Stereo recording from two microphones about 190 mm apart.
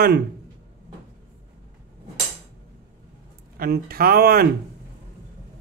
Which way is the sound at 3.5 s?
50° right (ahead or behind).